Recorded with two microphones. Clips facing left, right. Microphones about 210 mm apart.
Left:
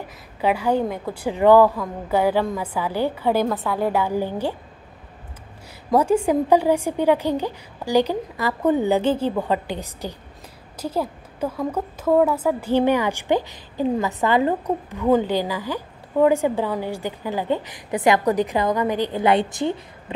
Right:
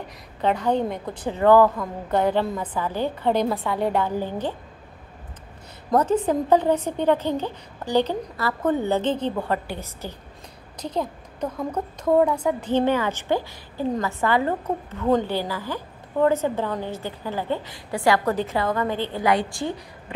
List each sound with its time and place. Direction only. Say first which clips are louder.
0.4 s a woman's voice: left 2 dB; 10° left (ahead or behind)
5.9 s a woman's voice: left 2 dB; 10° left (ahead or behind)